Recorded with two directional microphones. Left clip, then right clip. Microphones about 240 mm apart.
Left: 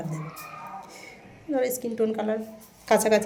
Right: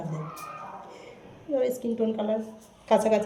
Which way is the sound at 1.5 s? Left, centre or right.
Left.